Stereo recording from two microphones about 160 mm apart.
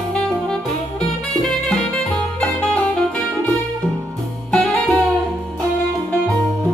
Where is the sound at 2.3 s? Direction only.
5° left (ahead or behind).